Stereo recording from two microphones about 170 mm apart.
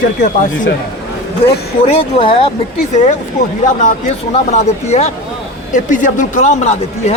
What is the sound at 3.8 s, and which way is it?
Speech, 45° left (ahead or behind).